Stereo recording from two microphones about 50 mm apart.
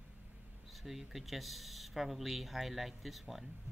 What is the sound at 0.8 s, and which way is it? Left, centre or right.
A man's voice, centre.